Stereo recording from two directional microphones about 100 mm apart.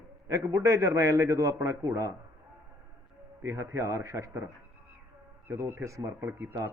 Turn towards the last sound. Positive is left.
turn(degrees=-25)  # may be behind; listen again after turning